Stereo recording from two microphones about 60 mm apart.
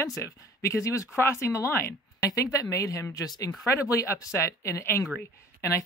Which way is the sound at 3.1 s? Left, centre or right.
Left.